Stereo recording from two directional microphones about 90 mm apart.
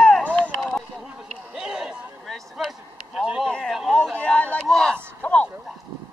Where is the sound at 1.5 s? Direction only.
10° right (ahead or behind).